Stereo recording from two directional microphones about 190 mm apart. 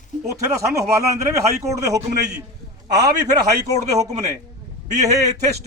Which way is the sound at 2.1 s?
60° right (ahead or behind).